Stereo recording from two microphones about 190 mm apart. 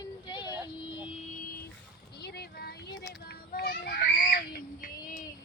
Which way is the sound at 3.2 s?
50° left (ahead or behind).